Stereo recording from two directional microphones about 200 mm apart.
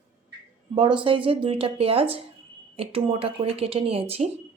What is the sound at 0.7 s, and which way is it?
Speech, 25° right (ahead or behind).